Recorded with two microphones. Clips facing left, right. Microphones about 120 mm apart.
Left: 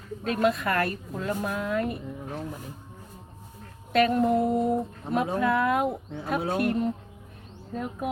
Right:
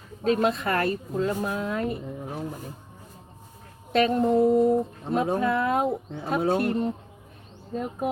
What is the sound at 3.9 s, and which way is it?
Speech, 25° right (ahead or behind).